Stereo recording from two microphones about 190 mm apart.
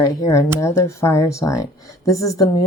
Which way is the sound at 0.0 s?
15° left (ahead or behind).